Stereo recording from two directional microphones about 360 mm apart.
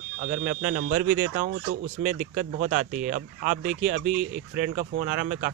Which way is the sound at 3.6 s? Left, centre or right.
Centre.